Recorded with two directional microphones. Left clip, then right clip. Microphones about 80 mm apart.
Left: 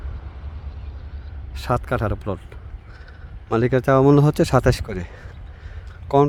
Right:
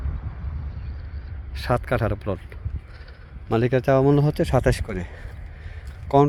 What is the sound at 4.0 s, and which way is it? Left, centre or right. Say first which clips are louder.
Speech: left 4 dB; left.